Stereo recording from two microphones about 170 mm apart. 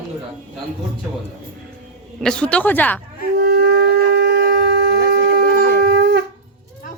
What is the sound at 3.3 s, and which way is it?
Shofar, 65° right (ahead or behind).